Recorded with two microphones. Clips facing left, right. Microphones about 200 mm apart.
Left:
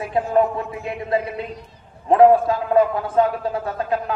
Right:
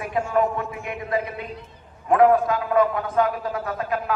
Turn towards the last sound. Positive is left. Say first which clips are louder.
# left 3 dB
turn(degrees=30)  # may be behind; listen again after turning